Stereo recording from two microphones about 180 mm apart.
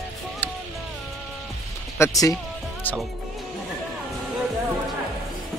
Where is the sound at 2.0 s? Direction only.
20° left (ahead or behind).